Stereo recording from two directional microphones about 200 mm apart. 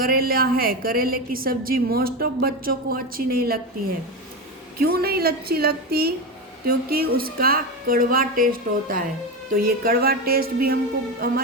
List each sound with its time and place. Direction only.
0.0 s a woman's voice: 50° right (ahead or behind)
4.8 s a woman's voice: 50° right (ahead or behind)